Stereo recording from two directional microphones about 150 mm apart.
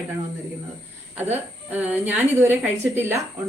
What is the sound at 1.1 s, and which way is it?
A woman's voice, 10° right (ahead or behind).